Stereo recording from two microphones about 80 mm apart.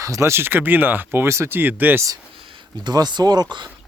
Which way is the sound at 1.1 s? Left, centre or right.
Right.